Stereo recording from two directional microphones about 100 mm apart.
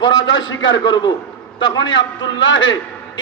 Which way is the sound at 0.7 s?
50° left (ahead or behind).